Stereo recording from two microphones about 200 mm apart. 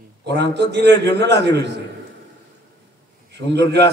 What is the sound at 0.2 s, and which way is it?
A man's voice, 60° right (ahead or behind).